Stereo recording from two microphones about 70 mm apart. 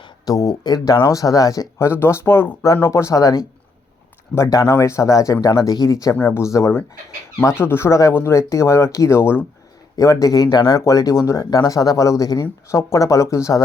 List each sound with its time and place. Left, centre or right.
0.3 s speech: left
0.6 s speech: left
0.9 s speech: left
1.9 s speech: left
4.4 s speech: left
4.7 s speech: left
6.2 s speech: left
9.9 s speech: left
10.8 s speech: left
11.6 s speech: left
12.6 s speech: left